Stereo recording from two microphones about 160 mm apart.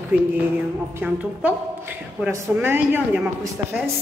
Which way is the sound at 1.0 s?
10° right (ahead or behind).